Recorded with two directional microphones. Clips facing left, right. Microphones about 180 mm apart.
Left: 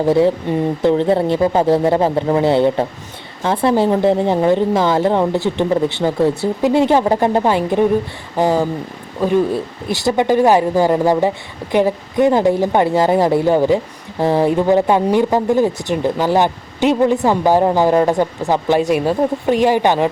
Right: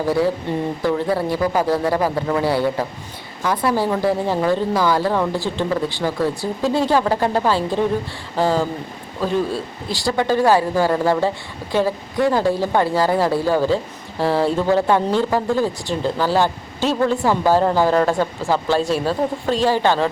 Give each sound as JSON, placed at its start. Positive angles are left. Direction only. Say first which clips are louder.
{"t": 0.0, "sound": "speech", "louder": "left 5 dB", "side_deg": 20}